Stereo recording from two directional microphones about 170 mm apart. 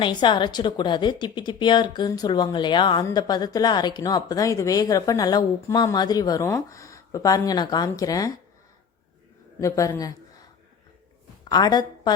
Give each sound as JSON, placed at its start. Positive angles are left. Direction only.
{"t": 0.0, "sound": "a woman's voice", "side_deg": 25}
{"t": 9.6, "sound": "a woman's voice", "side_deg": 20}
{"t": 11.4, "sound": "a woman's voice", "side_deg": 25}